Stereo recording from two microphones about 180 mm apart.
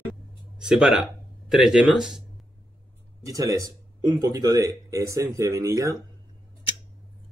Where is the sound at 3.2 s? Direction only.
20° right (ahead or behind).